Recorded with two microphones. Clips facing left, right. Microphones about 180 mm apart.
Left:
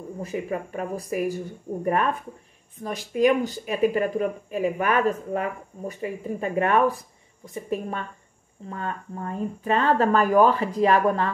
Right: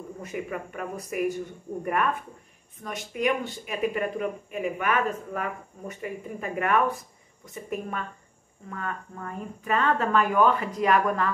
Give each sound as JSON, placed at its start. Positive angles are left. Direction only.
{"t": 0.2, "sound": "speech", "side_deg": 30}
{"t": 2.8, "sound": "speech", "side_deg": 35}